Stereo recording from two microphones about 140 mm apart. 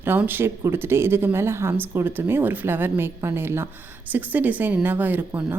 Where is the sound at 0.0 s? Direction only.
15° right (ahead or behind).